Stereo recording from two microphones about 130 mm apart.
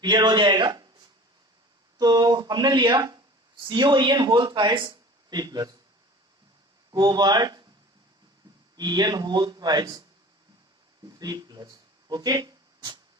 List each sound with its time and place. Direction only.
0.0 s speech: 35° right (ahead or behind)
2.0 s speech: 30° right (ahead or behind)
6.9 s speech: 30° right (ahead or behind)
8.7 s speech: 30° right (ahead or behind)
11.2 s speech: 30° right (ahead or behind)